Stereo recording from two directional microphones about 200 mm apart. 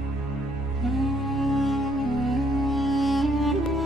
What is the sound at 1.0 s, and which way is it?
Music, centre (ahead or behind).